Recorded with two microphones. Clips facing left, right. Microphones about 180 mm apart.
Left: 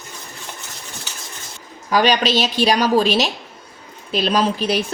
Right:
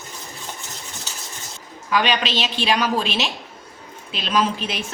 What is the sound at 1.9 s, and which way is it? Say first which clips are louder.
A woman's voice: left 5 dB; 40° left (ahead or behind).